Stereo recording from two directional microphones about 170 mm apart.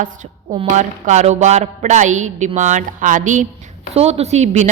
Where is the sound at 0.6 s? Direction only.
45° right (ahead or behind).